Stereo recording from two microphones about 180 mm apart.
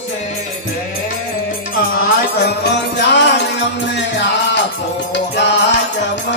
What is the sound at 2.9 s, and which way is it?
Music, 80° left.